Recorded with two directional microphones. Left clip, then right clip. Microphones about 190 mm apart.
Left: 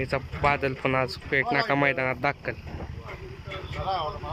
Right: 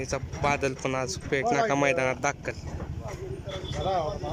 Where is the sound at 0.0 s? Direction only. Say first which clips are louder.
Left 3 dB; 10° right (ahead or behind).